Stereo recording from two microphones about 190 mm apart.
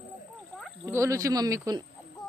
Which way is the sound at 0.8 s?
15° right (ahead or behind).